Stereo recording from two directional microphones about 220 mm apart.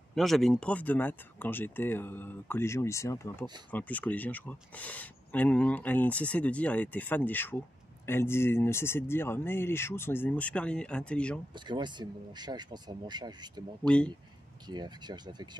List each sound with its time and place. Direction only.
0.1 s speech: centre (ahead or behind)
11.5 s speech: 20° right (ahead or behind)
13.8 s speech: 5° left (ahead or behind)
14.7 s speech: 20° right (ahead or behind)